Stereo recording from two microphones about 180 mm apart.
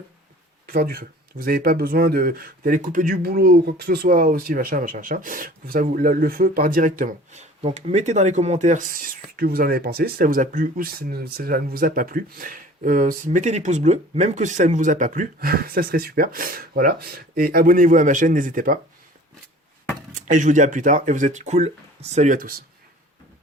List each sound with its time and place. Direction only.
0.7 s speech: 55° right (ahead or behind)
20.2 s speech: 45° right (ahead or behind)